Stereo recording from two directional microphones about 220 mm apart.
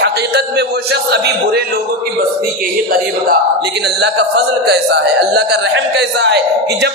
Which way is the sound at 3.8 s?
50° right (ahead or behind).